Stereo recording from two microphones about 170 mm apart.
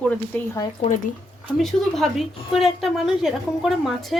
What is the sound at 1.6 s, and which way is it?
A woman's voice, centre (ahead or behind).